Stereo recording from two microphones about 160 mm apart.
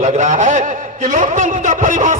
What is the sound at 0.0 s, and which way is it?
A man's voice, 50° right (ahead or behind).